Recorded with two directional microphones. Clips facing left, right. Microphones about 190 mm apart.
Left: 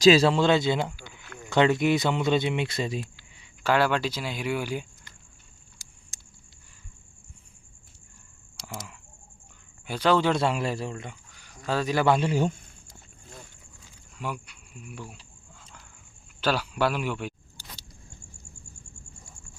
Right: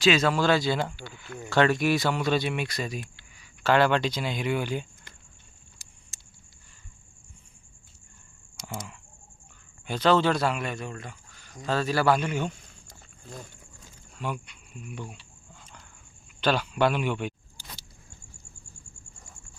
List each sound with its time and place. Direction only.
0.0 s speech: 35° left (ahead or behind)
3.6 s speech: 10° left (ahead or behind)
9.8 s speech: 10° left (ahead or behind)
10.3 s speech: 25° left (ahead or behind)
14.2 s speech: 10° left (ahead or behind)
16.4 s speech: 5° left (ahead or behind)